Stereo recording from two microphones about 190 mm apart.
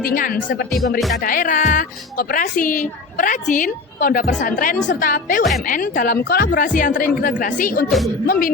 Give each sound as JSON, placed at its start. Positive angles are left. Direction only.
{"t": 0.0, "sound": "speech", "side_deg": 45}
{"t": 0.9, "sound": "speech", "side_deg": 0}
{"t": 1.2, "sound": "speech", "side_deg": 45}
{"t": 7.9, "sound": "speech", "side_deg": 0}
{"t": 8.3, "sound": "speech", "side_deg": 50}